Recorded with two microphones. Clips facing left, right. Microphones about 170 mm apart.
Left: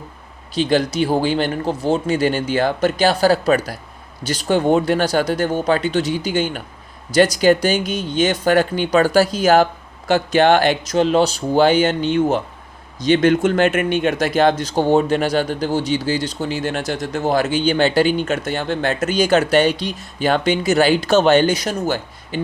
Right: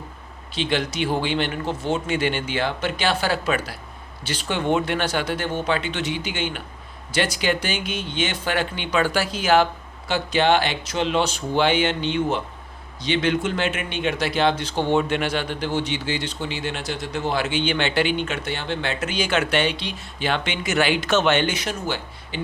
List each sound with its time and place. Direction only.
0.5 s speech: 40° left (ahead or behind)